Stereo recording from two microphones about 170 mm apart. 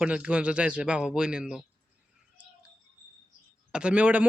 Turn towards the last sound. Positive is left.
turn(degrees=-10)  # may be behind; listen again after turning